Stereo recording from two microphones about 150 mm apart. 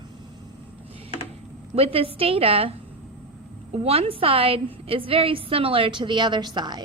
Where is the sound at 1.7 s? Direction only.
40° right (ahead or behind).